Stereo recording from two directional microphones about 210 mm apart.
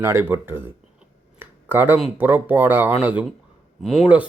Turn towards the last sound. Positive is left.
turn(degrees=-5)  # may be behind; listen again after turning